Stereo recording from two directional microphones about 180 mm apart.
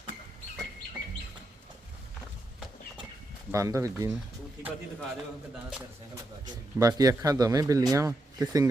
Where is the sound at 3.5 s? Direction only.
15° right (ahead or behind).